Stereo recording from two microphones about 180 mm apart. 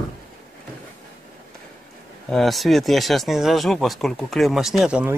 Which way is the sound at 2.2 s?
Centre (ahead or behind).